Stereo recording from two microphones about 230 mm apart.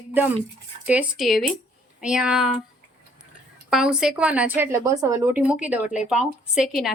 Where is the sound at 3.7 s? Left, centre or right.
Centre.